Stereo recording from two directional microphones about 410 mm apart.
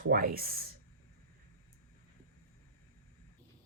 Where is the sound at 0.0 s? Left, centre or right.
Right.